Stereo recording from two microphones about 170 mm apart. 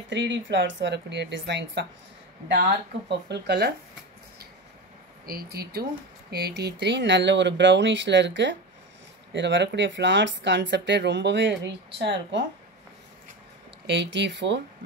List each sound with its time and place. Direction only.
0.1 s speech: 90° right
3.1 s speech: 80° right
5.2 s speech: 60° right (ahead or behind); by 12.1 s 90° right
13.8 s speech: 90° right